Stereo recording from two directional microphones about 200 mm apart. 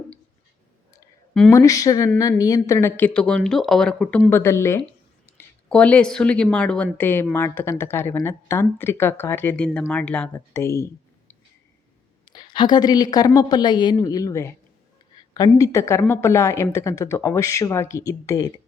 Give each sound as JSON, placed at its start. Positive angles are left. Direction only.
{"t": 1.3, "sound": "speech", "side_deg": 5}
{"t": 1.5, "sound": "a woman's voice", "side_deg": 15}
{"t": 12.2, "sound": "a woman's voice", "side_deg": 25}